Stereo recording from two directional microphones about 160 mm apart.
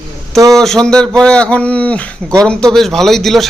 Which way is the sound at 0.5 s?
5° left (ahead or behind).